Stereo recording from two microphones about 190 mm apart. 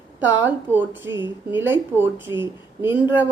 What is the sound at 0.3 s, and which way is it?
A woman's voice, 10° right (ahead or behind).